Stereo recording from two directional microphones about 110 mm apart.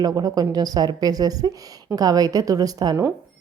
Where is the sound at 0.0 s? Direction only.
35° right (ahead or behind).